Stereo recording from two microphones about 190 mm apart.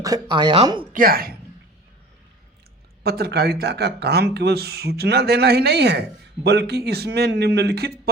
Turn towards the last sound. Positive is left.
turn(degrees=-60)  # may be behind; listen again after turning